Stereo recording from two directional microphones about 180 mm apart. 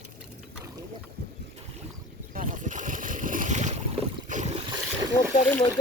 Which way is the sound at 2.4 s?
45° right (ahead or behind).